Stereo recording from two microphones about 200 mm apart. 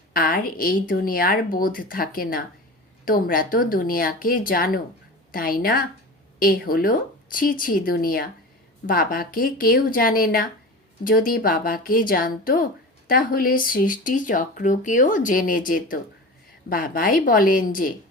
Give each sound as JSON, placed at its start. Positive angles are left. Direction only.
{"t": 0.1, "sound": "speech", "side_deg": 45}